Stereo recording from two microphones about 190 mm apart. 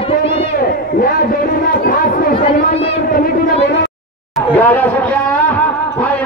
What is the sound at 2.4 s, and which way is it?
Speech, 30° left (ahead or behind).